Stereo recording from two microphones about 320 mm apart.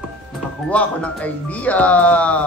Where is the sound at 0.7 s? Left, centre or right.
Centre.